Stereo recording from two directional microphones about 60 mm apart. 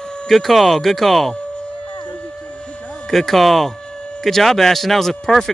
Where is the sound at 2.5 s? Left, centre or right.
Centre.